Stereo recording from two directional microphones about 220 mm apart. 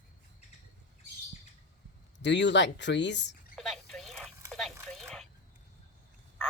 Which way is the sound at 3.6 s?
Centre (ahead or behind).